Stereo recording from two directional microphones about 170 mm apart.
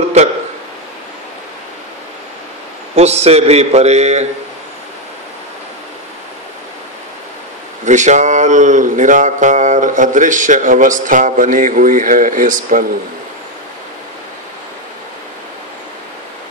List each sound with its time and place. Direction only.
3.0 s a man's voice: 40° right (ahead or behind)
7.8 s speech: 45° right (ahead or behind)